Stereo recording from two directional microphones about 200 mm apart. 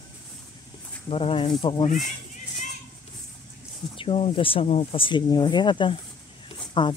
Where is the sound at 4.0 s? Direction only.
30° left (ahead or behind).